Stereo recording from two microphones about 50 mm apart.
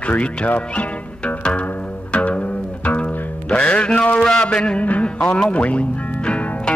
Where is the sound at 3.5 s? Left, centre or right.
Left.